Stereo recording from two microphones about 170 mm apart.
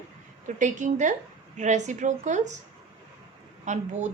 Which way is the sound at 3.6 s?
45° right (ahead or behind).